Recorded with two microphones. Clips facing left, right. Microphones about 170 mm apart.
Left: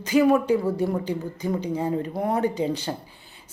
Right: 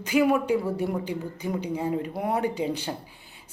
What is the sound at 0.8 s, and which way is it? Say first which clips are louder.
Speech: left 3 dB; 40° left (ahead or behind).